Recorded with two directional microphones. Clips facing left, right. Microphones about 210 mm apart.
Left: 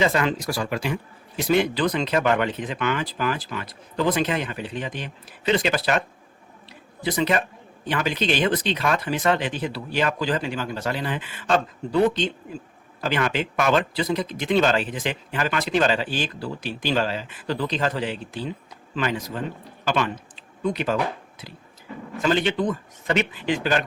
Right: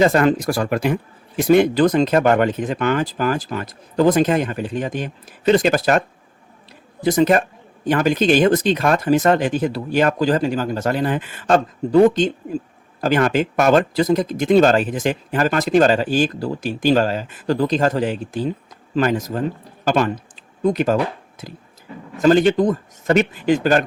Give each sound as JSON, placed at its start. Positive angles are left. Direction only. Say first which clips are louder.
{"t": 0.0, "sound": "speech", "louder": "right 7 dB", "side_deg": -45}
{"t": 7.0, "sound": "a man's voice", "louder": "right 7 dB", "side_deg": -45}